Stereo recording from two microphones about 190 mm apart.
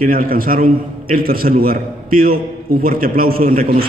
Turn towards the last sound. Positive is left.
turn(degrees=-50)  # may be behind; listen again after turning